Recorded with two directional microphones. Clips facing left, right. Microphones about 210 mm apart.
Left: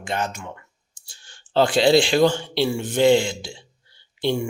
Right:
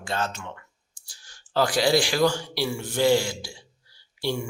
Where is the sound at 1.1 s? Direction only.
25° left (ahead or behind).